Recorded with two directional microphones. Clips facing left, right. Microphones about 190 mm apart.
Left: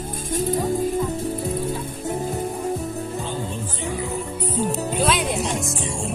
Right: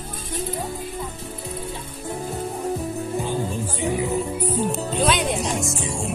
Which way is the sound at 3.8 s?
15° right (ahead or behind).